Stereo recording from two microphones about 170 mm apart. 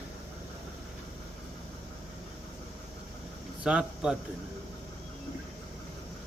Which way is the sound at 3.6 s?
5° right (ahead or behind).